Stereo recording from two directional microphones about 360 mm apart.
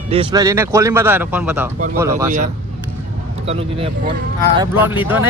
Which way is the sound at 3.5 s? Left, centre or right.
Centre.